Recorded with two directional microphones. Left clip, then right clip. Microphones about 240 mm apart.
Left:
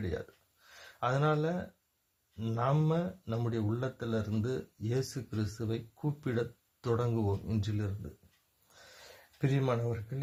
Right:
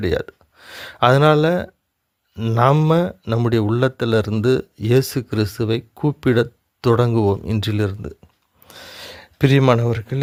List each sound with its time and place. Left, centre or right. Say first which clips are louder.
0.7 s speech: right 18 dB; right
9.4 s speech: right 18 dB; right